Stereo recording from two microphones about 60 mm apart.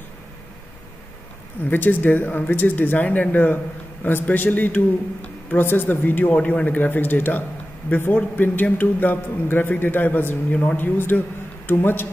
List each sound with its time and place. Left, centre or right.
1.7 s a man's voice: left